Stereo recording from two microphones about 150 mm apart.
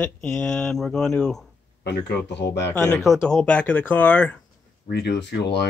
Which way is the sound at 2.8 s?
5° left (ahead or behind).